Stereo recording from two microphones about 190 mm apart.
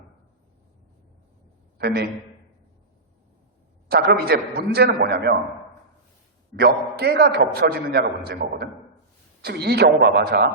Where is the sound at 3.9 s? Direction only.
55° right (ahead or behind).